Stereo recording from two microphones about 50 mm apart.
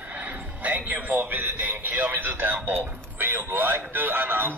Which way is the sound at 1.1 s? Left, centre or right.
Right.